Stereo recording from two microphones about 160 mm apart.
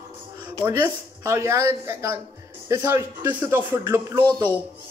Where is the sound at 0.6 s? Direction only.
15° right (ahead or behind).